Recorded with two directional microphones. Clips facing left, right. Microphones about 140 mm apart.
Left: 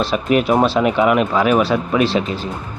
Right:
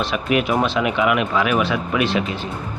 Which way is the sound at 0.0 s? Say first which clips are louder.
Left 4 dB; 35° left (ahead or behind).